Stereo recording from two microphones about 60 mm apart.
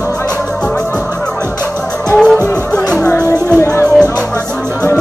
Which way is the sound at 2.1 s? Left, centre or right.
Centre.